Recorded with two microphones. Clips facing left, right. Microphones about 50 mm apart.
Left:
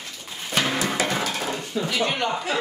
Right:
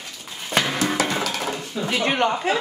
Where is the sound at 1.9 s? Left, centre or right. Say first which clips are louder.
Right 5 dB; right.